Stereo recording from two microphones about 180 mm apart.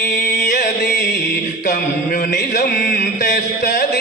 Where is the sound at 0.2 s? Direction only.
45° left (ahead or behind).